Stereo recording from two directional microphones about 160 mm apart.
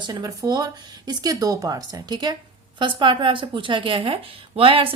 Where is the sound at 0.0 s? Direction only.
25° right (ahead or behind).